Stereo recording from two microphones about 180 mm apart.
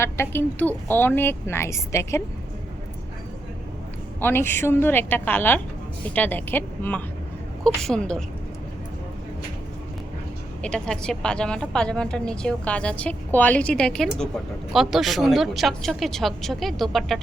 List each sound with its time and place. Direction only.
0.0 s a woman's voice: 10° left (ahead or behind)
4.2 s a woman's voice: 10° left (ahead or behind)
10.6 s a woman's voice: 5° left (ahead or behind)